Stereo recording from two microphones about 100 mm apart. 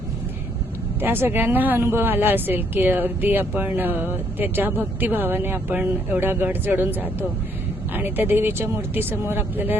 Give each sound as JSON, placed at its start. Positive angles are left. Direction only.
{"t": 1.0, "sound": "a woman's voice", "side_deg": -20}